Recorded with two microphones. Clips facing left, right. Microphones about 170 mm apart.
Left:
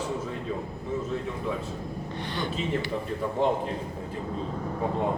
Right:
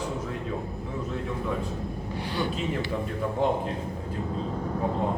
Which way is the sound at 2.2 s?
10° right (ahead or behind).